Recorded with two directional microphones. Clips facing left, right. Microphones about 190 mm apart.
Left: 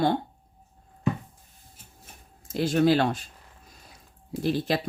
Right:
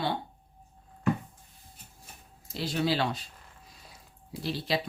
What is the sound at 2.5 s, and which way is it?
Speech, 50° left (ahead or behind).